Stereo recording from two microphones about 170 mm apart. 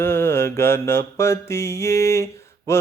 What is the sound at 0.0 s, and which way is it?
Mantra, 15° left (ahead or behind).